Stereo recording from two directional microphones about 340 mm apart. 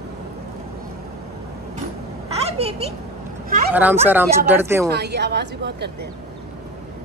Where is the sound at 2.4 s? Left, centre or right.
Centre.